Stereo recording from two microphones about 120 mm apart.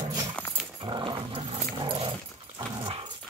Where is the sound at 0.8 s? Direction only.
40° right (ahead or behind).